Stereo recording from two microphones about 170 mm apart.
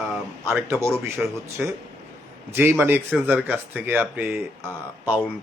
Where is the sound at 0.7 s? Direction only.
15° right (ahead or behind).